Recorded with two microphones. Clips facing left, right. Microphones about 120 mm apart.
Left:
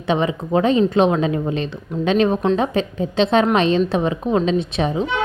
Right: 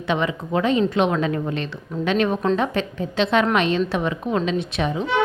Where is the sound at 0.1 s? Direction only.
25° left (ahead or behind).